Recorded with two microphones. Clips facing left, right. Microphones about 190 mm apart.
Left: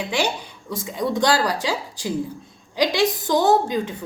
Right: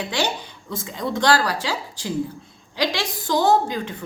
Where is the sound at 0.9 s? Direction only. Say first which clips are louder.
Even; 15° left (ahead or behind).